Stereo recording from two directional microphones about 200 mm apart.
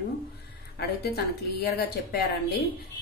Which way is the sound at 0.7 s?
55° left (ahead or behind).